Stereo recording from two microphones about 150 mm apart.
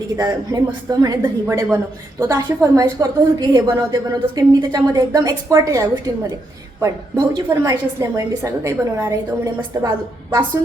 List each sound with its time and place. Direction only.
0.2 s a woman's voice: 25° right (ahead or behind)
7.3 s a woman's voice: 25° right (ahead or behind)